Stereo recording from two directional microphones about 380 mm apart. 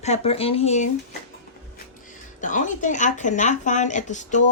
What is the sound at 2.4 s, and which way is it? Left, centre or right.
Speech, centre.